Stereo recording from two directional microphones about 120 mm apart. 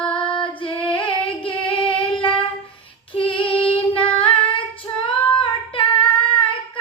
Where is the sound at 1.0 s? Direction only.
45° left (ahead or behind).